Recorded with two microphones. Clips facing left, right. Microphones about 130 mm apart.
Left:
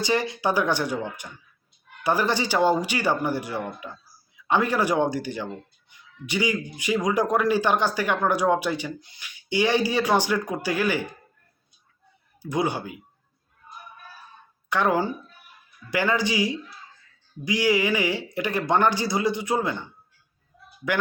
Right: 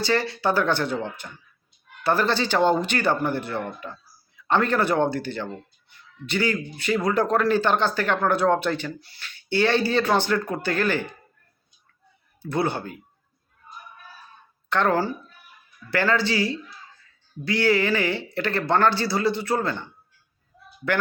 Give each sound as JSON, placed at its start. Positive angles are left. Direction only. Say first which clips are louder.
{"t": 0.0, "sound": "speech", "louder": "right 1 dB", "side_deg": 15}
{"t": 12.4, "sound": "speech", "louder": "even", "side_deg": 15}
{"t": 14.7, "sound": "speech", "louder": "right 1 dB", "side_deg": 10}